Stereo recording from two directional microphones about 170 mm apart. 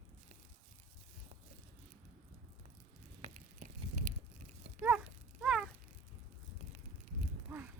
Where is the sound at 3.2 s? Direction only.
45° right (ahead or behind).